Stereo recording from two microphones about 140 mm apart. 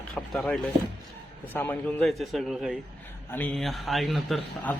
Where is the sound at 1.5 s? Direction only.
15° left (ahead or behind).